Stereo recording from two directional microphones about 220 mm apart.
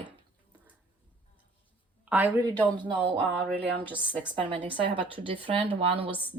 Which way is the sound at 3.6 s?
5° left (ahead or behind).